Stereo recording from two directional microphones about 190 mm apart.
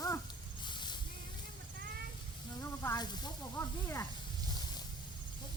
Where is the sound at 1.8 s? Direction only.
55° right (ahead or behind).